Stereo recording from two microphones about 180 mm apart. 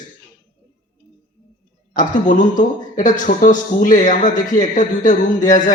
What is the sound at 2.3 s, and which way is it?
Speech, 45° left (ahead or behind).